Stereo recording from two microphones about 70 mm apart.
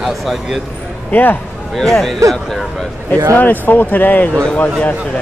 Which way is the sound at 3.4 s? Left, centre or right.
Left.